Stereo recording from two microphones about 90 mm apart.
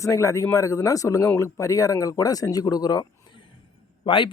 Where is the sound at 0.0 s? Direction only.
35° left (ahead or behind).